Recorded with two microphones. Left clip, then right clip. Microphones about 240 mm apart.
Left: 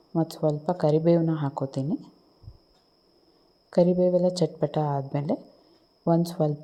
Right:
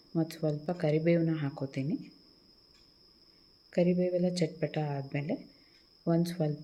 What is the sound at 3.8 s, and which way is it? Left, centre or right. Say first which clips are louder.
Speech: left 8 dB; left.